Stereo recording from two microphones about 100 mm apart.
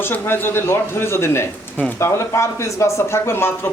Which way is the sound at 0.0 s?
20° left (ahead or behind).